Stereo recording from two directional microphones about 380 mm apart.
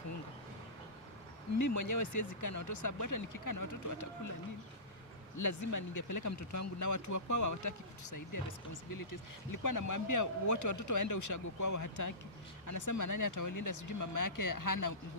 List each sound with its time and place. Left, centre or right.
1.6 s speech: left
5.4 s speech: left